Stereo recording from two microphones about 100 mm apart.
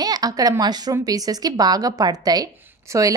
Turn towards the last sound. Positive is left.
turn(degrees=-35)  # may be behind; listen again after turning